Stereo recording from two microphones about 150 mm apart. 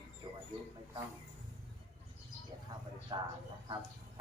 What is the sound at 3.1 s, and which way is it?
Speech, 30° right (ahead or behind).